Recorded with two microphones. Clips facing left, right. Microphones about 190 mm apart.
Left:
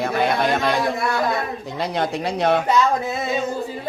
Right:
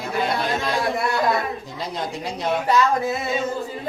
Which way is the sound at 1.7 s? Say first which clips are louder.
Left 9 dB; 70° left (ahead or behind).